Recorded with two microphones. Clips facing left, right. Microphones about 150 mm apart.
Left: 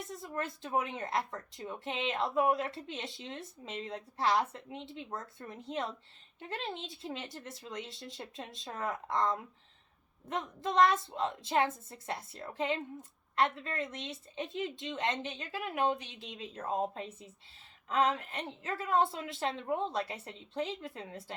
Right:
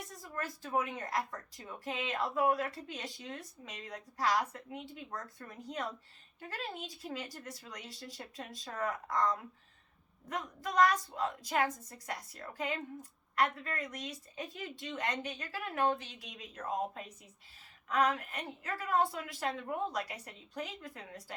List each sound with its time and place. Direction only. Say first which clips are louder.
0.1 s a woman's voice: left 4 dB; 20° left (ahead or behind)